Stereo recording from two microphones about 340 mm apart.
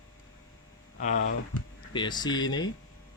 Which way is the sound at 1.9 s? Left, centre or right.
Centre.